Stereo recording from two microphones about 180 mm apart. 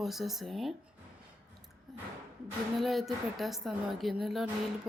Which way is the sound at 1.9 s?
Centre (ahead or behind).